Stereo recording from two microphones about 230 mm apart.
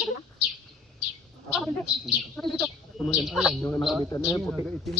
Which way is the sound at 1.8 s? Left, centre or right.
Centre.